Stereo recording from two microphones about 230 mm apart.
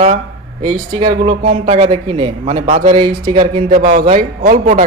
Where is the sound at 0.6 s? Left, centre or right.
Right.